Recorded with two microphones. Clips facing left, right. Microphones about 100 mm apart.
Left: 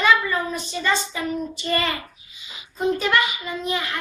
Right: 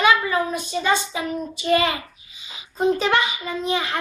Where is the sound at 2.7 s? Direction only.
30° right (ahead or behind).